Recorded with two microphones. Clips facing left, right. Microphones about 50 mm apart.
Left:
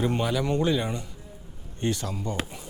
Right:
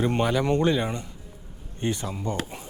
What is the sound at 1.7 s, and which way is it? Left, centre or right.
Speech, right.